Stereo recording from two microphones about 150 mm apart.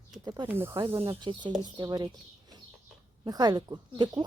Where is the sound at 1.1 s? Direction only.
30° right (ahead or behind).